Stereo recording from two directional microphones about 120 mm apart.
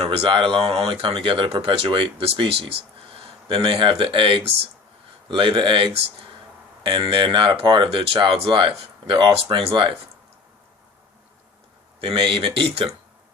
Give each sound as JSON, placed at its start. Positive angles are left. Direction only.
{"t": 0.0, "sound": "speech", "side_deg": -55}
{"t": 11.9, "sound": "speech", "side_deg": -50}